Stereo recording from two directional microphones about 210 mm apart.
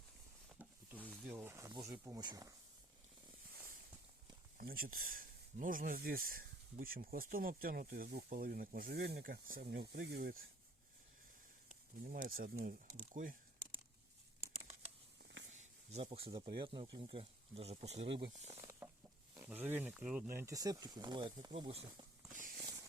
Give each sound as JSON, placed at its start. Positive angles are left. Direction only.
{"t": 0.6, "sound": "a sound", "side_deg": -10}
{"t": 1.2, "sound": "speech", "side_deg": -10}
{"t": 4.5, "sound": "speech", "side_deg": -45}
{"t": 12.0, "sound": "speech", "side_deg": -45}
{"t": 13.1, "sound": "a sound", "side_deg": -40}
{"t": 15.2, "sound": "a sound", "side_deg": -55}
{"t": 15.5, "sound": "speech", "side_deg": -30}
{"t": 18.6, "sound": "chicken", "side_deg": -10}
{"t": 19.3, "sound": "speech", "side_deg": -10}
{"t": 22.3, "sound": "walk", "side_deg": -40}